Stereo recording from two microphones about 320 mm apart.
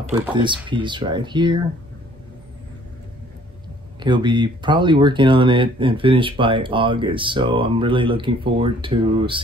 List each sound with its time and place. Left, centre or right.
0.1 s speech: centre
4.0 s speech: centre